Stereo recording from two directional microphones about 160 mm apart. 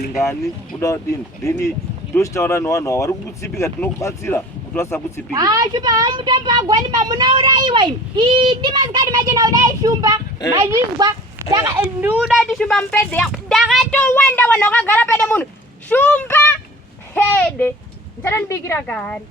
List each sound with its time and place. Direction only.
2.1 s speech: 20° left (ahead or behind)
5.3 s a woman's voice: 20° right (ahead or behind); by 19.2 s 10° left (ahead or behind)